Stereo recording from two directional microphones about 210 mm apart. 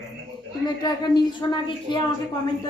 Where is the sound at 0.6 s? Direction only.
20° left (ahead or behind).